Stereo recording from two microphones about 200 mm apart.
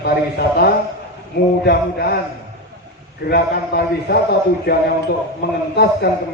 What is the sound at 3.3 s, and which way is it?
A man's voice, 50° left (ahead or behind).